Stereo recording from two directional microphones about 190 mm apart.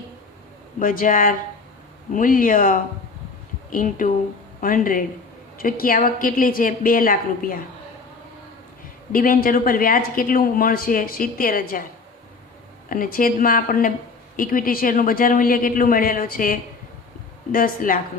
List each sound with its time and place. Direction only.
0.8 s speech: 45° left (ahead or behind)
9.1 s speech: 50° left (ahead or behind)
12.9 s speech: 45° left (ahead or behind)